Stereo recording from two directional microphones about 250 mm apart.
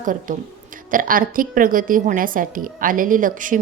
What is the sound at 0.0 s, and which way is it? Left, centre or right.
A woman's voice, right.